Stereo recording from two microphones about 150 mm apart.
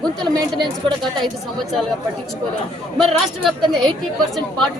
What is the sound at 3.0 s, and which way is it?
Speech, centre (ahead or behind).